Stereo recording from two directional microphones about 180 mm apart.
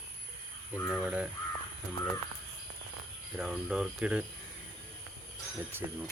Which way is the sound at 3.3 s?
5° right (ahead or behind).